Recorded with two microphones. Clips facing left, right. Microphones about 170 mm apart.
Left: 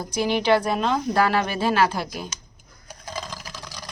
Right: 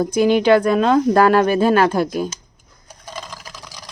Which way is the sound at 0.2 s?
50° right (ahead or behind).